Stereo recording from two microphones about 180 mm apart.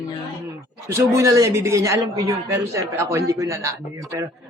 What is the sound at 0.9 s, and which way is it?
A woman's voice, 15° right (ahead or behind).